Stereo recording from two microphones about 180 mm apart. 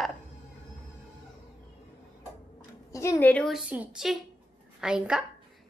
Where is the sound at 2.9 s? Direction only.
15° left (ahead or behind).